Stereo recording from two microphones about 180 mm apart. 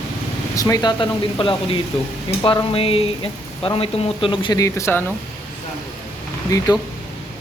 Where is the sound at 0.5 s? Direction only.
20° left (ahead or behind).